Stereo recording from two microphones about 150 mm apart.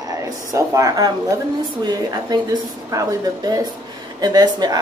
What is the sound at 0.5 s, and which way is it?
Speech, 20° right (ahead or behind).